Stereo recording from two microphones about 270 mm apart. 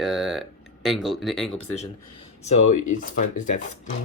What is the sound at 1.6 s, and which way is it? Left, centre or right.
Speech, left.